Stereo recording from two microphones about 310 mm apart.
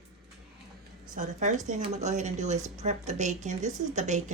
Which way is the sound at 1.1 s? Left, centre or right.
Right.